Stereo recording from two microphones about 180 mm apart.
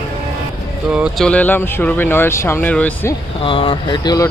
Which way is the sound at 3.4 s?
30° left (ahead or behind).